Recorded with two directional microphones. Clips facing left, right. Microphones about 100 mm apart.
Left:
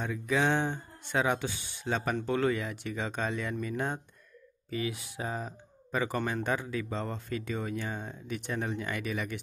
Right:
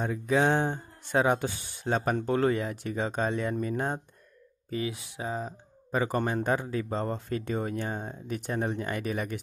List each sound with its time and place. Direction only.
0.0 s speech: 35° right (ahead or behind)